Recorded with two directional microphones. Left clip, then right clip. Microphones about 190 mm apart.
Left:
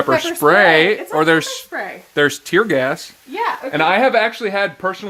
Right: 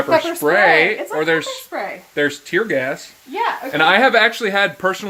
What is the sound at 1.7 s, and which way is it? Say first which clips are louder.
Speech: right 1 dB; 5° left (ahead or behind).